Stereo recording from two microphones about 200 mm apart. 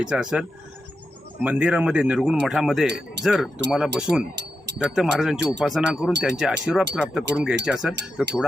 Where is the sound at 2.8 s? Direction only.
55° right (ahead or behind).